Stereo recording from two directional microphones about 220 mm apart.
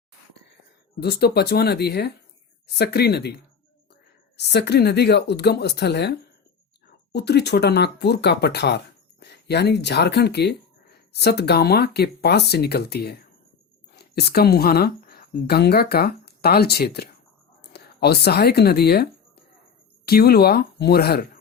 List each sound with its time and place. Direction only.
0.9 s speech: 45° left (ahead or behind)
17.6 s a sound: 50° left (ahead or behind)
20.1 s speech: 45° left (ahead or behind)